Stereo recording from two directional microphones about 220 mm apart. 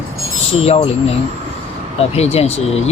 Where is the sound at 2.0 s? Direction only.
30° left (ahead or behind).